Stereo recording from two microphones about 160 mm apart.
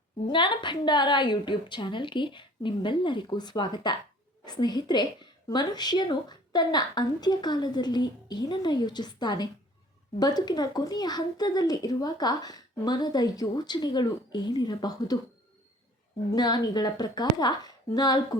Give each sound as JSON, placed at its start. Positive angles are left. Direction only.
{"t": 0.3, "sound": "speech", "side_deg": 30}
{"t": 16.3, "sound": "speech", "side_deg": 25}